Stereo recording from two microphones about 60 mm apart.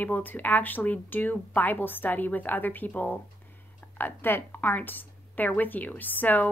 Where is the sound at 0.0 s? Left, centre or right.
Left.